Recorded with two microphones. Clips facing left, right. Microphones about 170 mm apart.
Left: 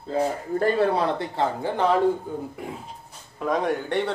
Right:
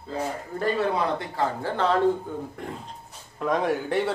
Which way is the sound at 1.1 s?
20° left (ahead or behind).